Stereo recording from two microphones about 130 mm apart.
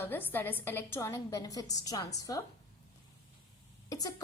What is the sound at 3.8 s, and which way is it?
Speech, 30° left (ahead or behind).